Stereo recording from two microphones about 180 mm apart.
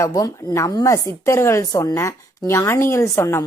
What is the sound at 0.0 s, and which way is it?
Speech, 15° left (ahead or behind).